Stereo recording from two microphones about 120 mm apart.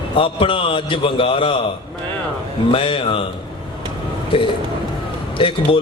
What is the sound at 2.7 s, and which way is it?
Speech, 50° left (ahead or behind).